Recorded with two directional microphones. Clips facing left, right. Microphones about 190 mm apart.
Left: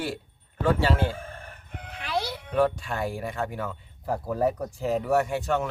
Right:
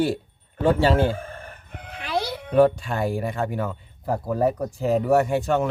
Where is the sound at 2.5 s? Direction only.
30° right (ahead or behind).